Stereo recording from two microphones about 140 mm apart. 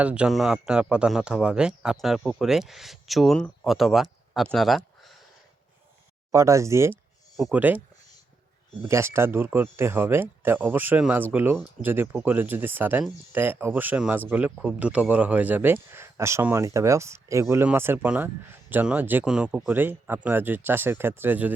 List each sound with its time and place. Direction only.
0.0 s a man's voice: 10° right (ahead or behind)
6.3 s speech: 20° right (ahead or behind)
8.8 s speech: 20° right (ahead or behind)